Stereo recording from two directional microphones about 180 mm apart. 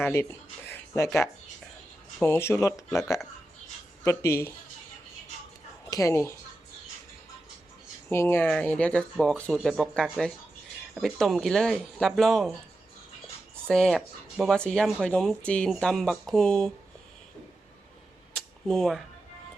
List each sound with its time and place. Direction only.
0.0 s speech: 15° left (ahead or behind)
2.2 s speech: 15° left (ahead or behind)
4.0 s speech: 15° left (ahead or behind)
5.9 s speech: 20° left (ahead or behind)
8.1 s speech: 15° left (ahead or behind)
13.7 s speech: 5° left (ahead or behind)
18.3 s a sound: centre (ahead or behind)